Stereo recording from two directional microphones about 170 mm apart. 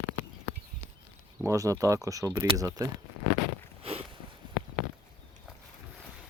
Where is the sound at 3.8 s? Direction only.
35° right (ahead or behind).